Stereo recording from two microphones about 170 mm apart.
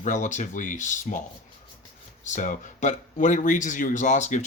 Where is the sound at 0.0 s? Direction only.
45° left (ahead or behind).